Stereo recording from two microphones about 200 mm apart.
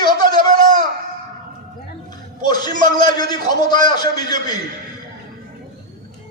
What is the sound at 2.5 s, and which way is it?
A man's voice, 20° left (ahead or behind).